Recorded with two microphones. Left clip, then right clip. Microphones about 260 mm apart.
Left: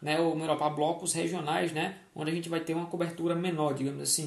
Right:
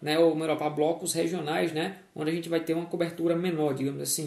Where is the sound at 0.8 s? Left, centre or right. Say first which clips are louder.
Right 3 dB; left.